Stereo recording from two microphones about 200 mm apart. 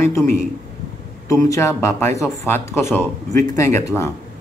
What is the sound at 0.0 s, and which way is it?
Speech, 15° left (ahead or behind).